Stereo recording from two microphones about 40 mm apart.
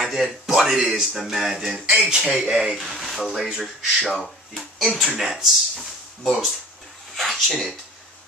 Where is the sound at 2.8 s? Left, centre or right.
Centre.